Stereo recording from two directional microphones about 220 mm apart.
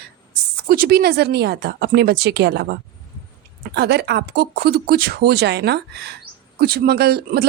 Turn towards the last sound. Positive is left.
turn(degrees=-45)  # may be behind; listen again after turning